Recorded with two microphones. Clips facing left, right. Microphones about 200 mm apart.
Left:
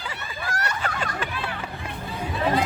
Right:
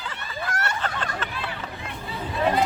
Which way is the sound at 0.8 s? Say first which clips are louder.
Left 1 dB; 10° left (ahead or behind).